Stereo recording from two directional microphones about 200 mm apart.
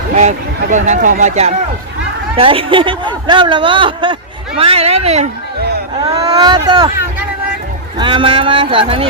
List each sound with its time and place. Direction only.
0.2 s speech: 35° right (ahead or behind); by 6.9 s 20° right (ahead or behind)
7.9 s speech: 25° right (ahead or behind)